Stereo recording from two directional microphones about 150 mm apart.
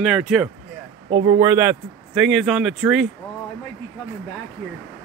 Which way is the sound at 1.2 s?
20° right (ahead or behind).